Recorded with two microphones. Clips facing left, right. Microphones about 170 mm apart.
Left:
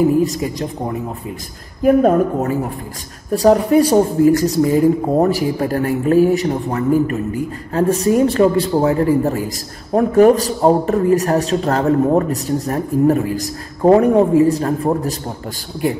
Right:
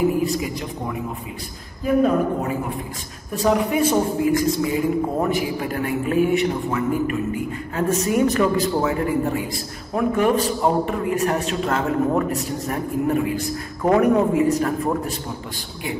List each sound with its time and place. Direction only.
0.2 s a man's voice: 40° left (ahead or behind)